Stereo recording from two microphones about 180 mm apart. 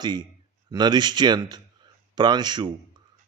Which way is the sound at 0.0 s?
25° right (ahead or behind).